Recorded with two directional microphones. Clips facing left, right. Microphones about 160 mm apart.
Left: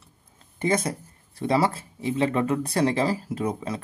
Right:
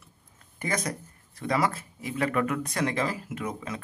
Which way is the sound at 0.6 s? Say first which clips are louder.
Left 6 dB; 25° left (ahead or behind).